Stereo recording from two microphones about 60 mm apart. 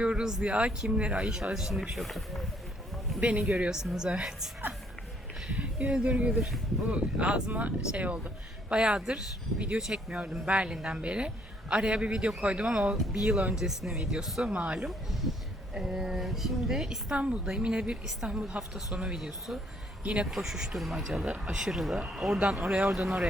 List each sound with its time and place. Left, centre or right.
0.0 s speech: centre
3.2 s speech: right
5.5 s speech: right
13.6 s speech: centre
14.4 s speech: right
14.8 s a woman's voice: centre
17.2 s speech: centre
20.3 s a woman's voice: centre